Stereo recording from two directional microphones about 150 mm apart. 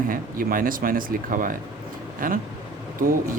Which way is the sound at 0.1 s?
70° right (ahead or behind).